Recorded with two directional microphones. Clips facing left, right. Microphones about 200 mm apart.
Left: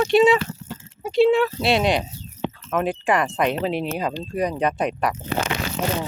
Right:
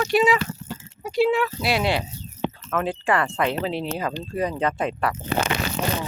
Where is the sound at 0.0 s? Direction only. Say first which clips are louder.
Left 4 dB; 25° left (ahead or behind).